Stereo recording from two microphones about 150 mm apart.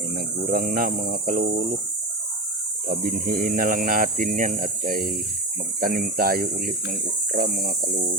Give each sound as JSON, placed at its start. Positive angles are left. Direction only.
{"t": 0.4, "sound": "speech", "side_deg": -65}
{"t": 2.8, "sound": "speech", "side_deg": -75}